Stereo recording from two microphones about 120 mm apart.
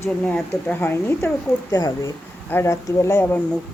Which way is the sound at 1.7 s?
30° left (ahead or behind).